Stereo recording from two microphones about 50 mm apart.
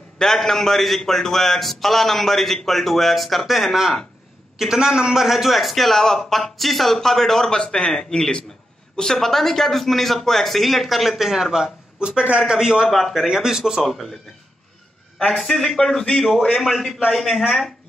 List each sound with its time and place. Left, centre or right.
0.2 s a man's voice: centre
12.8 s a man's voice: centre
15.1 s a man's voice: centre